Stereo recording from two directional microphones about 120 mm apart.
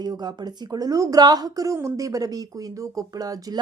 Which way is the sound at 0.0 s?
35° right (ahead or behind).